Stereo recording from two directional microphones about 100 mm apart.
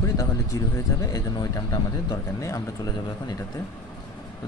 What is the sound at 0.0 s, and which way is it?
A man's voice, 30° left (ahead or behind).